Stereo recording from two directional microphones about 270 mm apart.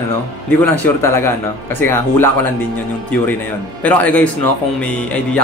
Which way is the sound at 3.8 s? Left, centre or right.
Centre.